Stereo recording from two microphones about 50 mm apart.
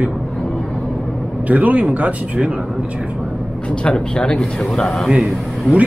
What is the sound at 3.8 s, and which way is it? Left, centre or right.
Speech, centre.